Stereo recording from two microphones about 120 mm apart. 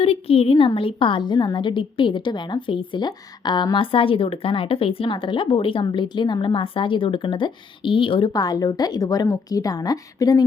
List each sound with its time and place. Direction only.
0.0 s a woman's voice: 55° left (ahead or behind); by 10.4 s 30° left (ahead or behind)